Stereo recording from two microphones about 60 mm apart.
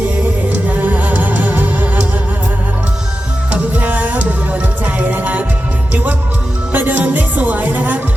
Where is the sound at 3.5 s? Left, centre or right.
Right.